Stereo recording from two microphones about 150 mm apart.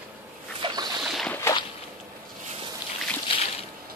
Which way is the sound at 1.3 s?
15° left (ahead or behind).